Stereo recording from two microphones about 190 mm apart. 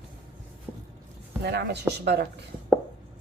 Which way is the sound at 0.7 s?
15° right (ahead or behind).